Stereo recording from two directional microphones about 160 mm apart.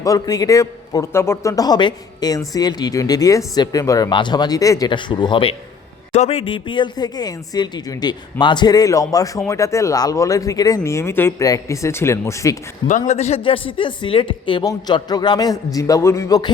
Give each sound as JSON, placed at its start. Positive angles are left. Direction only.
{"t": 0.0, "sound": "speech", "side_deg": 20}
{"t": 13.1, "sound": "speech", "side_deg": 45}